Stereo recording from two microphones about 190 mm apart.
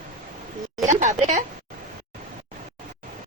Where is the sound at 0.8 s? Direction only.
40° right (ahead or behind).